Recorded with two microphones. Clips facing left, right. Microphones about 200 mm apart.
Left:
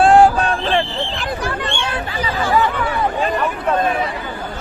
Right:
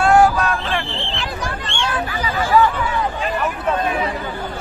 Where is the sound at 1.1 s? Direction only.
55° left (ahead or behind).